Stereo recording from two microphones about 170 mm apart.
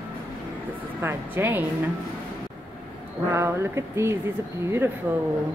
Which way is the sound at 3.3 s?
15° right (ahead or behind).